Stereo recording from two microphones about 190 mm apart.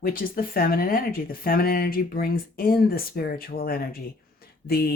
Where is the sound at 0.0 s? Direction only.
50° left (ahead or behind).